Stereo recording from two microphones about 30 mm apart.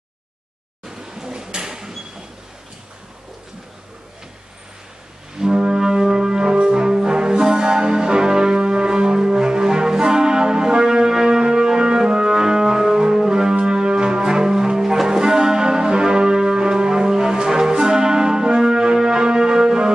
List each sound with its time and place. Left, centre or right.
0.8 s a sound: right
5.4 s brass instrument: right
15.0 s music: right